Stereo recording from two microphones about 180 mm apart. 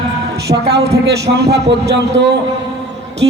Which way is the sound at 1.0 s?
70° right (ahead or behind).